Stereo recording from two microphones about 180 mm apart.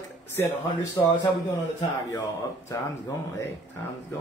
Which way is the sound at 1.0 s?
25° left (ahead or behind).